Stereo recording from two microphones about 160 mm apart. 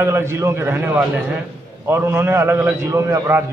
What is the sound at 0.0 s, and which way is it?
A man's voice, 15° right (ahead or behind).